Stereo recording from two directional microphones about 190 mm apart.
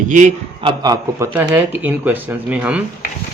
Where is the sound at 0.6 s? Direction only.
20° right (ahead or behind).